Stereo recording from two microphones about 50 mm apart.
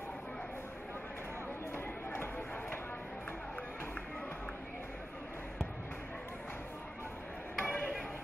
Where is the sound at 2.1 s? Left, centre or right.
Left.